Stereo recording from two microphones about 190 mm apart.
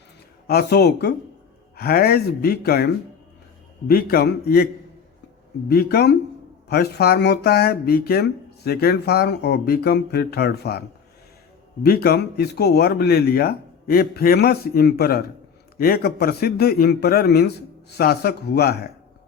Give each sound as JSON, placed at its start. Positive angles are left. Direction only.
{"t": 0.4, "sound": "speech", "side_deg": 55}